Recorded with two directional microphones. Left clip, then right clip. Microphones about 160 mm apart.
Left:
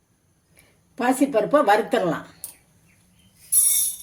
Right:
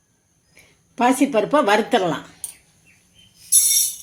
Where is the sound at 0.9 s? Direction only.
45° right (ahead or behind).